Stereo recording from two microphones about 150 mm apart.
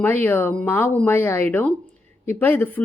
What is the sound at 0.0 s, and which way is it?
A woman's voice, 15° left (ahead or behind).